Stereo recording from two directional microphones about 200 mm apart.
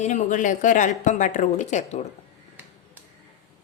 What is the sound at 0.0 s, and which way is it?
A woman's voice, 40° left (ahead or behind).